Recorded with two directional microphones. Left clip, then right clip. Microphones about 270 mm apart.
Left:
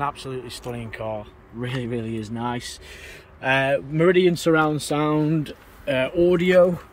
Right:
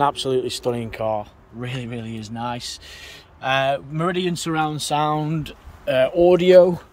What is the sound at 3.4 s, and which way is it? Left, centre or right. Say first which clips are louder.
Speech: even; right.